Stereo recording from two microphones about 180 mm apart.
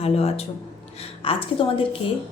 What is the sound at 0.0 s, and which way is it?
A woman's voice, 35° left (ahead or behind).